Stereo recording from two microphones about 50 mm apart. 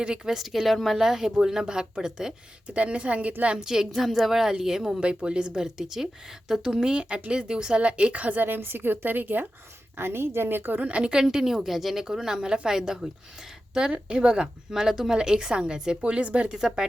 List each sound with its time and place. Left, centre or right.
0.0 s speech: centre
2.6 s a woman's voice: right
3.7 s a woman's voice: centre
4.9 s a woman's voice: right
10.0 s a woman's voice: right
10.8 s speech: right
16.5 s speech: centre